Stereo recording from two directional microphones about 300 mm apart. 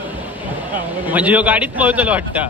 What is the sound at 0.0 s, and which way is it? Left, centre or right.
A man's voice, centre.